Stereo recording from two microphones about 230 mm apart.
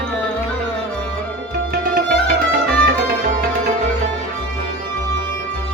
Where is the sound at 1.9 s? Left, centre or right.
Right.